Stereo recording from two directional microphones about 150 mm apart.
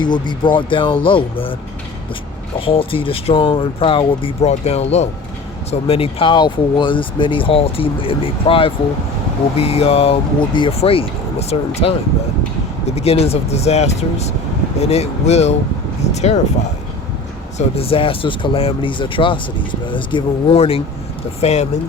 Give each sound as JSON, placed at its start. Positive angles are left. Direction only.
{"t": 0.0, "sound": "speech", "side_deg": 30}
{"t": 2.6, "sound": "speech", "side_deg": 35}
{"t": 13.0, "sound": "speech", "side_deg": 45}
{"t": 17.7, "sound": "speech", "side_deg": 40}